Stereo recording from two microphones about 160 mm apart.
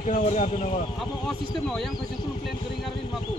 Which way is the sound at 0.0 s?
45° left (ahead or behind).